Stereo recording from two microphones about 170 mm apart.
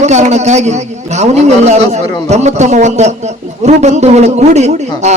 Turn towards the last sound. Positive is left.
turn(degrees=-40)  # may be behind; listen again after turning